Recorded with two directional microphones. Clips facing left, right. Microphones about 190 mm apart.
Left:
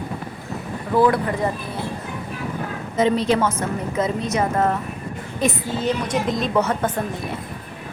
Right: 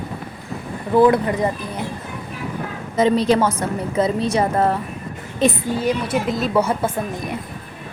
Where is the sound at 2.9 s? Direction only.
35° right (ahead or behind).